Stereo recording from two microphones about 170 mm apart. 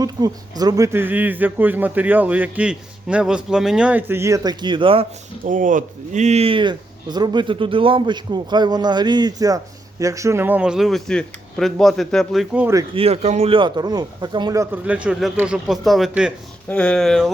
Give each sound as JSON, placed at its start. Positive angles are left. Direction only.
{"t": 0.0, "sound": "speech", "side_deg": -20}
{"t": 5.5, "sound": "speech", "side_deg": -50}
{"t": 12.9, "sound": "speech", "side_deg": -35}